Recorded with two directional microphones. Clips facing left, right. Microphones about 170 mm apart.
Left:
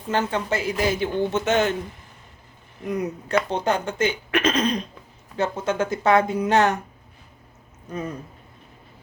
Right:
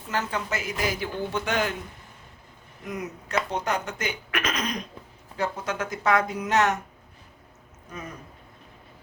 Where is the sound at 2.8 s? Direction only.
35° left (ahead or behind).